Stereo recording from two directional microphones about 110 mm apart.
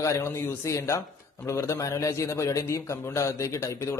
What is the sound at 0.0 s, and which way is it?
A man's voice, 25° left (ahead or behind).